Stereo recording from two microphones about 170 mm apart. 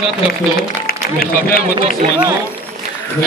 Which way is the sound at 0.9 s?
60° left (ahead or behind).